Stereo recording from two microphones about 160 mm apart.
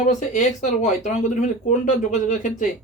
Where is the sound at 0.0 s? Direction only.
50° left (ahead or behind).